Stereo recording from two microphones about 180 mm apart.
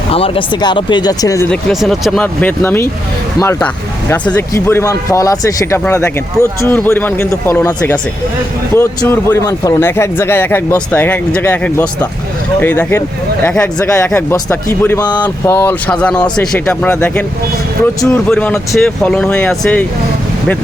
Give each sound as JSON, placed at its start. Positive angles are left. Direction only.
{"t": 0.1, "sound": "speech", "side_deg": 30}
{"t": 1.5, "sound": "speech", "side_deg": 0}
{"t": 4.1, "sound": "speech", "side_deg": 15}
{"t": 18.3, "sound": "speech", "side_deg": 5}